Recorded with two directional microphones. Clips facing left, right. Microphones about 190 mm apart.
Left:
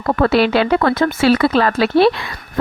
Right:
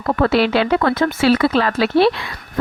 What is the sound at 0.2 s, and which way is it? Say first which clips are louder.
Speech: left 2 dB; 45° left (ahead or behind).